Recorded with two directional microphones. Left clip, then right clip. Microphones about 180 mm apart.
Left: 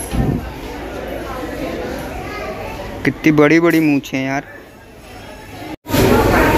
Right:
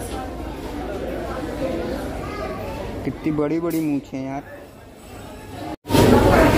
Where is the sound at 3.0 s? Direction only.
10° left (ahead or behind).